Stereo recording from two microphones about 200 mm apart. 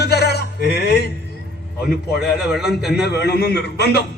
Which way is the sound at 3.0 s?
55° left (ahead or behind).